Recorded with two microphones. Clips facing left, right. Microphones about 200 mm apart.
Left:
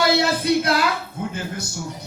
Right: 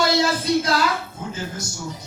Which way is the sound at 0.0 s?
60° left (ahead or behind).